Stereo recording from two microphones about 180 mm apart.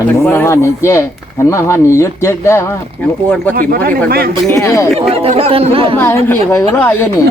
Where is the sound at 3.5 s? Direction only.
50° right (ahead or behind).